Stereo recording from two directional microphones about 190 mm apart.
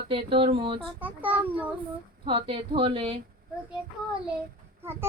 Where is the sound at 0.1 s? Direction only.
30° right (ahead or behind).